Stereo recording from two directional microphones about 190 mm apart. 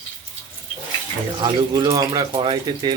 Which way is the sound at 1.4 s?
20° right (ahead or behind).